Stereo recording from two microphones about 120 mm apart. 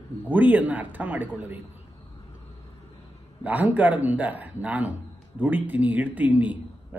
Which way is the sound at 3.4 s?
15° right (ahead or behind).